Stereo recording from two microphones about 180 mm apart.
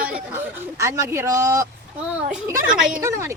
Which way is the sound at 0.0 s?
10° right (ahead or behind).